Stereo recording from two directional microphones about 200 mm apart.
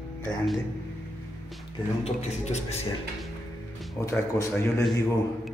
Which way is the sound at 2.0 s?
30° left (ahead or behind).